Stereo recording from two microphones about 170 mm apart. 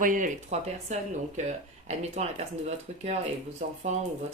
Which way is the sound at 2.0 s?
40° right (ahead or behind).